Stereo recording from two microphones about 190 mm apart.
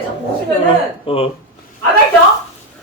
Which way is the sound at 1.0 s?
30° left (ahead or behind).